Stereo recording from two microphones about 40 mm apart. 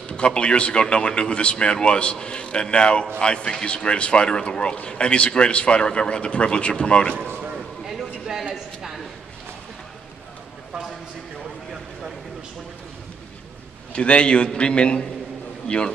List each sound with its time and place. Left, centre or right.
0.1 s a man's voice: left
8.5 s a sound: centre
13.9 s a man's voice: left